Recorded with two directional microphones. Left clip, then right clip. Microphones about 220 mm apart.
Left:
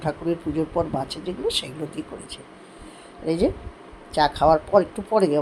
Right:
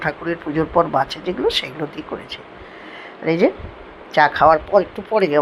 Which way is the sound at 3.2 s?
5° right (ahead or behind).